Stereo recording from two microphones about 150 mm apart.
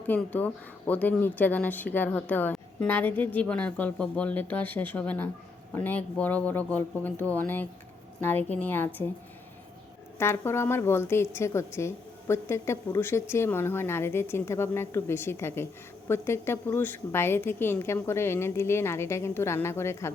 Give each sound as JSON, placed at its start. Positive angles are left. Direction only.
{"t": 0.1, "sound": "a woman's voice", "side_deg": 10}
{"t": 10.2, "sound": "a woman's voice", "side_deg": 15}